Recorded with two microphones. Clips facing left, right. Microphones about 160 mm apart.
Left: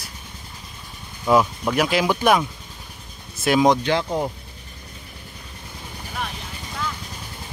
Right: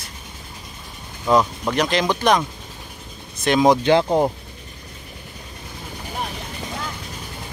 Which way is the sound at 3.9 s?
20° right (ahead or behind).